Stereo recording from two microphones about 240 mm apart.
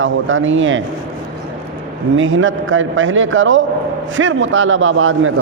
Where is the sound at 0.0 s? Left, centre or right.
Right.